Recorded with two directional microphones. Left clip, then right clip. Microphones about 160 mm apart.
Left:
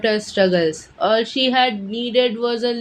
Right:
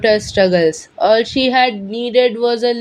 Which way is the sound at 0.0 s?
40° right (ahead or behind).